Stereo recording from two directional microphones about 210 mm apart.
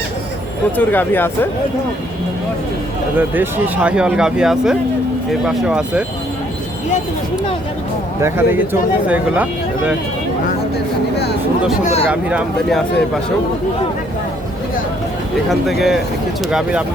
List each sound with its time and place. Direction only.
0.8 s speech: 10° left (ahead or behind)
3.2 s speech: 10° right (ahead or behind)
8.2 s speech: 10° right (ahead or behind)
11.8 s speech: 30° left (ahead or behind)
12.1 s speech: 5° right (ahead or behind)
15.4 s speech: centre (ahead or behind)